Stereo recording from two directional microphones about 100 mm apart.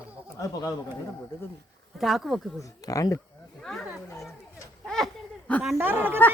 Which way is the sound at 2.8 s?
35° left (ahead or behind).